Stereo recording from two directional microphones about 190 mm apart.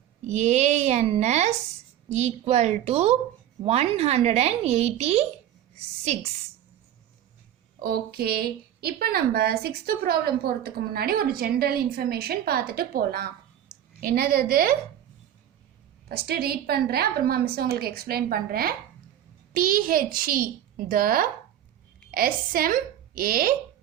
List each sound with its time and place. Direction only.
0.3 s a woman's voice: 35° right (ahead or behind)
7.8 s a woman's voice: 55° right (ahead or behind)
16.0 s a woman's voice: 55° right (ahead or behind)